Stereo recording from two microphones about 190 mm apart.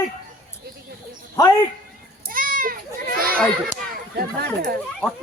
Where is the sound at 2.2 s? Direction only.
45° right (ahead or behind).